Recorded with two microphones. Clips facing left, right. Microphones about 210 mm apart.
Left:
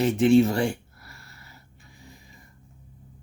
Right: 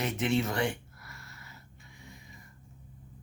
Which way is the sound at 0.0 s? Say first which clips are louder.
Left 11 dB; 30° left (ahead or behind).